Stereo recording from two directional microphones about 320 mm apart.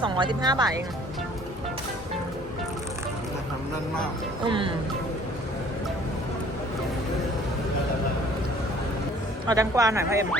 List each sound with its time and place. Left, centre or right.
0.0 s speech: centre
4.4 s speech: centre
9.5 s speech: centre